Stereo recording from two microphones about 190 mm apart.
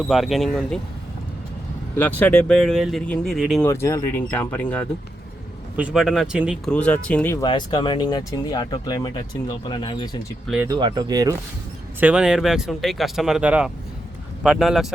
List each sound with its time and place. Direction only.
0.1 s speech: centre (ahead or behind)
2.0 s speech: 10° left (ahead or behind)
3.7 s speech: 15° left (ahead or behind)
5.7 s speech: 5° right (ahead or behind)
6.7 s speech: 5° left (ahead or behind)
7.4 s speech: 25° left (ahead or behind)
10.4 s speech: 5° right (ahead or behind)
10.7 s speech: 20° right (ahead or behind)
11.9 s speech: 5° right (ahead or behind)